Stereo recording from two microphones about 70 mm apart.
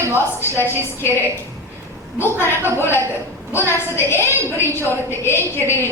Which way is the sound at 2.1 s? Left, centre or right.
Left.